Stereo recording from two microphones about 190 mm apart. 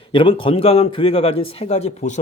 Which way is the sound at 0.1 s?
25° left (ahead or behind).